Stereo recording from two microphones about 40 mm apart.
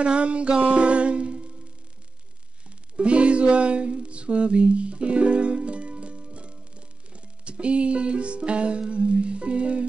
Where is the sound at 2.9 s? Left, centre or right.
Right.